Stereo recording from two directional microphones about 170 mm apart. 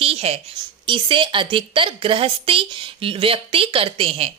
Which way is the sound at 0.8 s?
30° right (ahead or behind).